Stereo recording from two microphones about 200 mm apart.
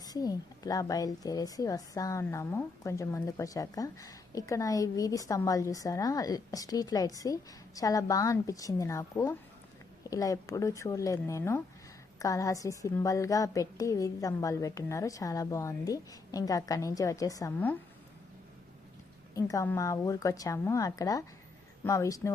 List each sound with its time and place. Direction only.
0.0 s speech: 20° left (ahead or behind)
19.3 s speech: 15° left (ahead or behind)